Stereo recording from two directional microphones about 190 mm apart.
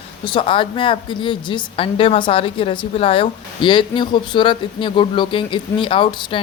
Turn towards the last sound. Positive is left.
turn(degrees=25)  # may be behind; listen again after turning